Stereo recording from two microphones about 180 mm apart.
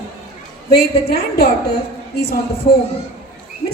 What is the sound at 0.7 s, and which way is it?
Speech, 60° left (ahead or behind).